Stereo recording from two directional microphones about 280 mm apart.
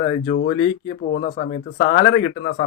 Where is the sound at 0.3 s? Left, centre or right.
Left.